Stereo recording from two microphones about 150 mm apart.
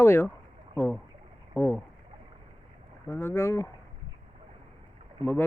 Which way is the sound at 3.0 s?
15° left (ahead or behind).